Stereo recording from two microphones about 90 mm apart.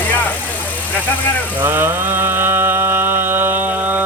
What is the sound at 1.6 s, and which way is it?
Mantra, 25° right (ahead or behind).